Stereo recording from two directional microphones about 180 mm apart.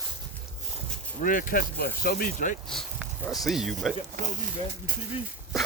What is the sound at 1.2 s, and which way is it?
Speech, 50° left (ahead or behind).